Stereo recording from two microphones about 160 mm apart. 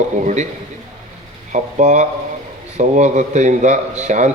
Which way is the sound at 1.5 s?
50° right (ahead or behind).